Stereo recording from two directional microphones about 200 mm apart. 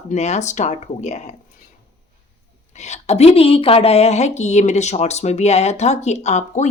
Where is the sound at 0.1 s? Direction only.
35° left (ahead or behind).